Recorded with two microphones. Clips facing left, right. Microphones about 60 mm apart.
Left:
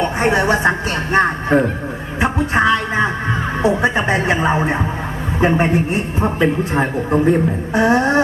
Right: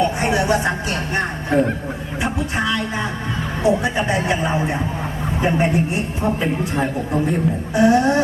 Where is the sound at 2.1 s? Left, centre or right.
Left.